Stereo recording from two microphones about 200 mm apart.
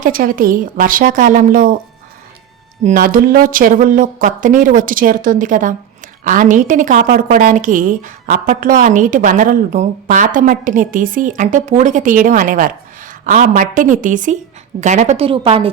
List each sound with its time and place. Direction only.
0.0 s speech: 45° right (ahead or behind)
2.8 s a woman's voice: 45° right (ahead or behind); by 15.7 s 25° right (ahead or behind)